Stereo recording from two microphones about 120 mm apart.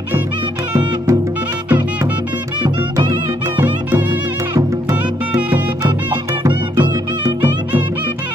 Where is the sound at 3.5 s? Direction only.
15° right (ahead or behind).